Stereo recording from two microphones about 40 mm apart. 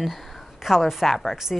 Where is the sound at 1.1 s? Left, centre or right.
Centre.